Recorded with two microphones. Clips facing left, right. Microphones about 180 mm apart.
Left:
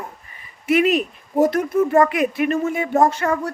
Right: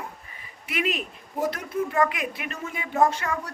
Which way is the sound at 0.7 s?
45° left (ahead or behind).